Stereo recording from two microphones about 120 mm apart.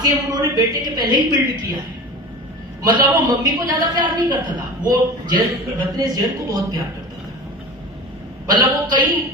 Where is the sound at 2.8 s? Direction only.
35° right (ahead or behind).